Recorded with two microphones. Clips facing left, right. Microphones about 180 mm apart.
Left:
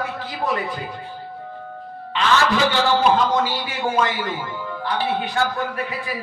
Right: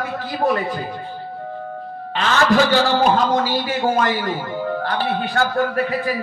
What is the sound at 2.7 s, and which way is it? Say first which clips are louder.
A man's voice: right 2 dB; 45° right (ahead or behind).